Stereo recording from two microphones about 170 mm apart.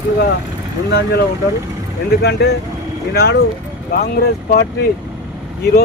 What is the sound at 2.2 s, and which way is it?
Speech, 70° left (ahead or behind).